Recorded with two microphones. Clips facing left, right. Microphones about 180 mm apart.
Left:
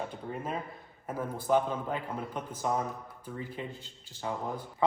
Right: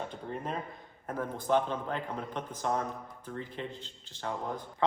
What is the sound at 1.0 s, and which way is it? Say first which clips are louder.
A man's voice: even; 5° left (ahead or behind).